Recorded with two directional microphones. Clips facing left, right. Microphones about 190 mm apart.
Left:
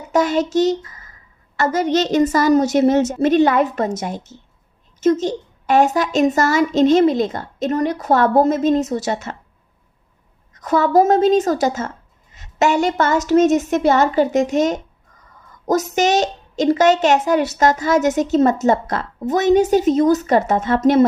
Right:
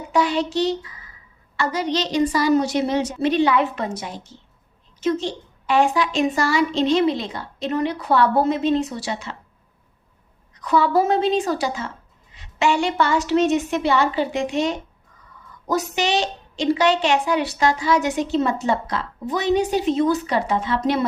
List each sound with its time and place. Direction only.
0.1 s a child's voice: 45° left (ahead or behind)
10.5 s speech: 45° left (ahead or behind)